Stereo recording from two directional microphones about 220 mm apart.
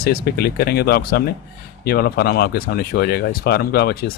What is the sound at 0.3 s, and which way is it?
Speech, 45° left (ahead or behind).